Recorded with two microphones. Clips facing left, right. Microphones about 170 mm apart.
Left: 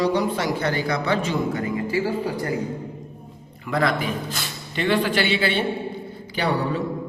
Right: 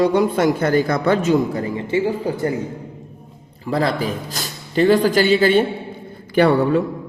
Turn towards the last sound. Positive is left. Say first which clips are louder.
# right 9 dB
turn(degrees=-55)  # may be behind; listen again after turning